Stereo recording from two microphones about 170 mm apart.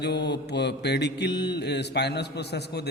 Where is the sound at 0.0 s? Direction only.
80° left.